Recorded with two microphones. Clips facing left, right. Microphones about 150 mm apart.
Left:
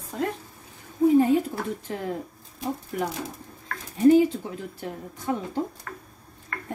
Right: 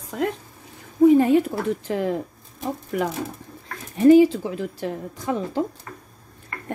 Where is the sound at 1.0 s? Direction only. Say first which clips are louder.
Right 4 dB; 75° right (ahead or behind).